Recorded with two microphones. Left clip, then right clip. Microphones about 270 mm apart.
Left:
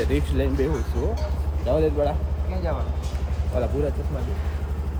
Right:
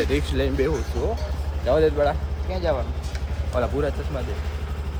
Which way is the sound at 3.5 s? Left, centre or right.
Centre.